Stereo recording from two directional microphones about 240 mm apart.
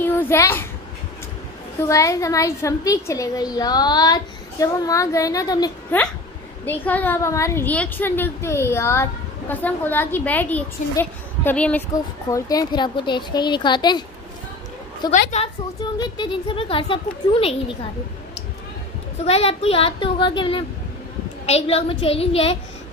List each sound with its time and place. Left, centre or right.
0.0 s a child's voice: centre
1.8 s a woman's voice: centre
15.0 s a woman's voice: left
19.2 s a woman's voice: left